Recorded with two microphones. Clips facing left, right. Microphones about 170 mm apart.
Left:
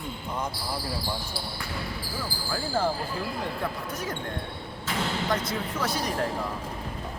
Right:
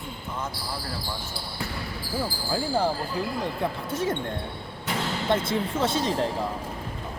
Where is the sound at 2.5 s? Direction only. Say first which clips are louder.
Right 2 dB; 15° right (ahead or behind).